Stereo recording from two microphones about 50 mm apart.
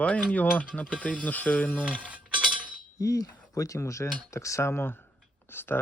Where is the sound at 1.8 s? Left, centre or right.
Right.